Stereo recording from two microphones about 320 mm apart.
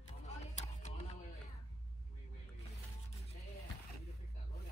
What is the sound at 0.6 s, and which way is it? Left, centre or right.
Music, left.